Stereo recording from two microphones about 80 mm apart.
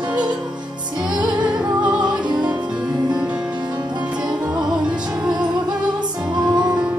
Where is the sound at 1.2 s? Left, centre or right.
Centre.